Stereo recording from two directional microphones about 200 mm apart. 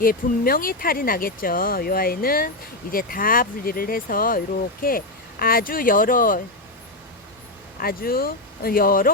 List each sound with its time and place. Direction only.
0.0 s speech: 45° left (ahead or behind)
7.8 s speech: 45° left (ahead or behind)